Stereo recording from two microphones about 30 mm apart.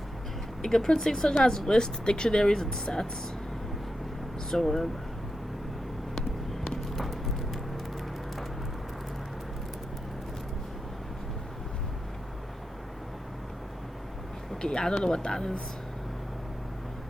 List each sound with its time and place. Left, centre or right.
0.6 s speech: centre
4.5 s speech: centre
6.9 s a sound: centre
14.6 s speech: left